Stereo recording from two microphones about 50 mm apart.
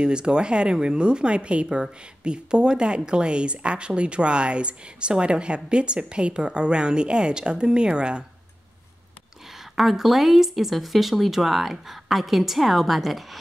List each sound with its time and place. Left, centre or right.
0.0 s speech: centre
9.8 s speech: centre